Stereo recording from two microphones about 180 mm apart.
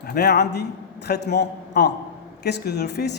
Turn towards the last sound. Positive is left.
turn(degrees=65)  # may be behind; listen again after turning